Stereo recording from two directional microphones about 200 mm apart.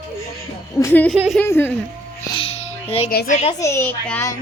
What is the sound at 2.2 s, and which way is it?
Music, 25° left (ahead or behind).